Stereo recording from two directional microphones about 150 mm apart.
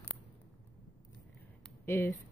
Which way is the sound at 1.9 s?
15° left (ahead or behind).